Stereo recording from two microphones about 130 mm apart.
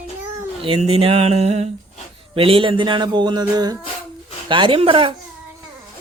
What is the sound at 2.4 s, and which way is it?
Speech, 45° right (ahead or behind).